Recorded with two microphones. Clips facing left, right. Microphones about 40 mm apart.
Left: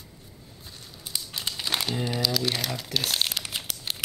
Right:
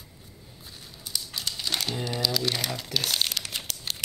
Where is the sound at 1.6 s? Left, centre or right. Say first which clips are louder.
Left 2 dB; centre.